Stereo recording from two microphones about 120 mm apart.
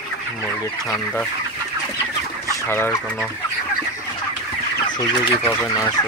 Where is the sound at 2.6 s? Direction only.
20° left (ahead or behind).